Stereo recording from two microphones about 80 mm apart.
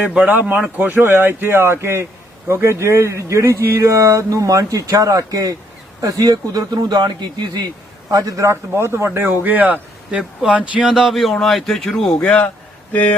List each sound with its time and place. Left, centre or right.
0.0 s speech: centre; by 7.6 s right
8.1 s a man's voice: right; by 12.3 s centre
12.9 s speech: centre